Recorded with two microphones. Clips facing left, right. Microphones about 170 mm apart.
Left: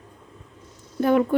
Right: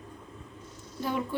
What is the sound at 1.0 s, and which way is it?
Speech, 60° left (ahead or behind).